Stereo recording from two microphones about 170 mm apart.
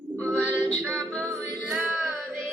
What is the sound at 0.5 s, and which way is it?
Music, 10° right (ahead or behind).